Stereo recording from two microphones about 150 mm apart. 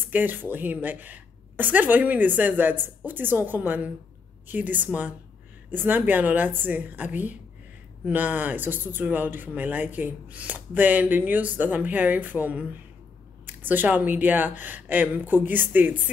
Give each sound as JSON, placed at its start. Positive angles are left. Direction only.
{"t": 0.1, "sound": "speech", "side_deg": -10}